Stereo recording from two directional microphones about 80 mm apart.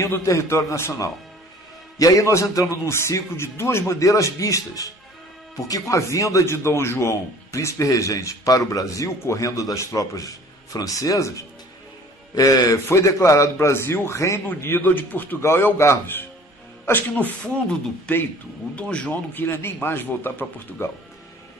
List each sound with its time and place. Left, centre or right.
0.0 s a man's voice: left
12.8 s a man's voice: left
14.5 s speech: left
15.4 s speech: left
18.1 s speech: centre
19.3 s speech: left